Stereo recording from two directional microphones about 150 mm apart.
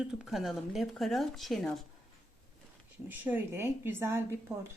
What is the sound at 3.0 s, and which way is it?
A woman's voice, 10° right (ahead or behind).